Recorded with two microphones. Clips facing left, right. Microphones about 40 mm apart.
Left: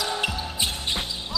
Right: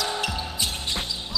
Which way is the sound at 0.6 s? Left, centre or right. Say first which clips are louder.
Left 3 dB; left.